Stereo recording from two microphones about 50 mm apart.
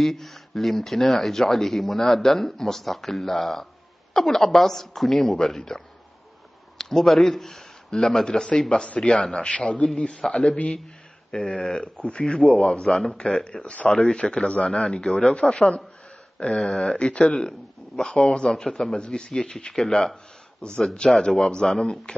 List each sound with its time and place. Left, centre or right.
0.0 s speech: centre
6.8 s speech: centre
8.8 s a man's voice: left; by 20.2 s centre
20.6 s a man's voice: centre